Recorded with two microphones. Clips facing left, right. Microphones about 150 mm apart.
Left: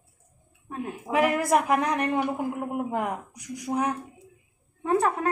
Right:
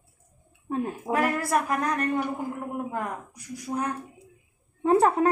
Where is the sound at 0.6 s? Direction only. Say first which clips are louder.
Right 5 dB; 35° right (ahead or behind).